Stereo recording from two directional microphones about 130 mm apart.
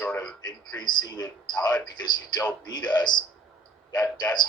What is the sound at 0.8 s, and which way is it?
Speech, 35° left (ahead or behind).